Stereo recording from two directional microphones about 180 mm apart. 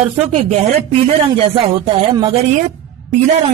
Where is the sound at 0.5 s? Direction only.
35° right (ahead or behind).